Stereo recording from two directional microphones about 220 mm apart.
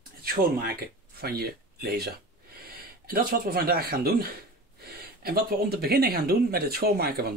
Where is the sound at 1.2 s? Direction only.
45° right (ahead or behind).